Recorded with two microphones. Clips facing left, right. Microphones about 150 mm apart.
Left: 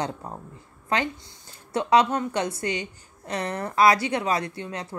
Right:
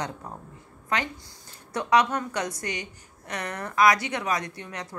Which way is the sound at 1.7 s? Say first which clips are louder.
Left 2 dB; 30° left (ahead or behind).